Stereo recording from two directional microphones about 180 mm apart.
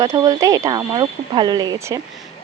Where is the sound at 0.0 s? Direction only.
20° right (ahead or behind).